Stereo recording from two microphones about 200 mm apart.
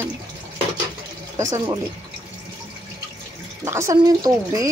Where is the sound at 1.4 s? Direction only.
20° right (ahead or behind).